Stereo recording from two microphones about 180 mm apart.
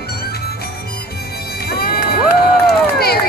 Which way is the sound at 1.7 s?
60° left (ahead or behind).